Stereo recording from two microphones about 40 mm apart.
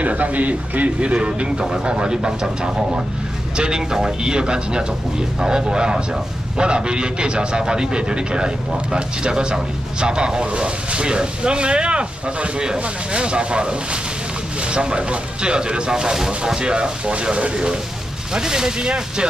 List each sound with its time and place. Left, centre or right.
0.0 s speech: right